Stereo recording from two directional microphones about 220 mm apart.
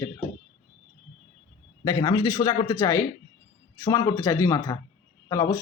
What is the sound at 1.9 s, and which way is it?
Speech, 15° left (ahead or behind).